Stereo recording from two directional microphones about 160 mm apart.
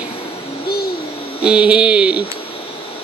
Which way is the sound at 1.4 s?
5° right (ahead or behind).